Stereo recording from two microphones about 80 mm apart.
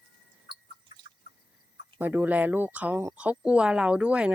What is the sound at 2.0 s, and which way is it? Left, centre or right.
Speech, right.